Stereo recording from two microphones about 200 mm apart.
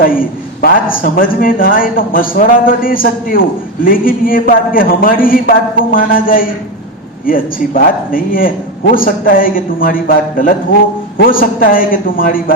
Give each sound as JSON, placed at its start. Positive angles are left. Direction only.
{"t": 0.0, "sound": "a man's voice", "side_deg": 45}